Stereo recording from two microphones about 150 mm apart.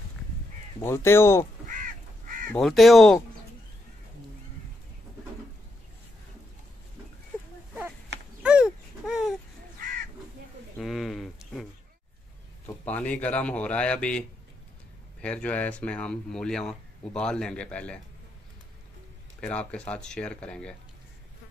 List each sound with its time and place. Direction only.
0.7 s speech: 15° left (ahead or behind)
1.7 s crow: 65° right (ahead or behind)
2.5 s speech: centre (ahead or behind)
8.4 s dog: 5° right (ahead or behind)
10.8 s a sound: centre (ahead or behind)
12.8 s speech: 10° left (ahead or behind)
15.2 s speech: 10° left (ahead or behind)
19.4 s speech: 5° left (ahead or behind)